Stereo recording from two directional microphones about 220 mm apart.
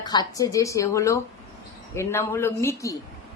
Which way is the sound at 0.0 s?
20° left (ahead or behind).